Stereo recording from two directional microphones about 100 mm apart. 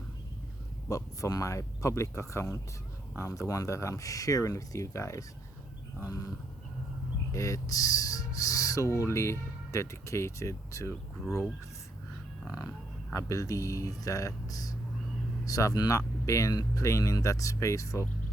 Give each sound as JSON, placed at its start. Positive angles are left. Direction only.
{"t": 0.9, "sound": "speech", "side_deg": 35}
{"t": 7.3, "sound": "speech", "side_deg": 35}
{"t": 13.1, "sound": "speech", "side_deg": 35}